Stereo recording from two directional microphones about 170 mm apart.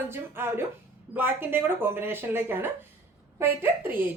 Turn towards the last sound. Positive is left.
turn(degrees=-10)  # may be behind; listen again after turning